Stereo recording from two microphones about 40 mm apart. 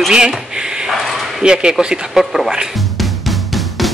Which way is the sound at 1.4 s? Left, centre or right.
Right.